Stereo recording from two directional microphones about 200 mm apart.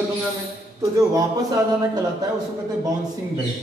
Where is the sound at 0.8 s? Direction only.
15° right (ahead or behind).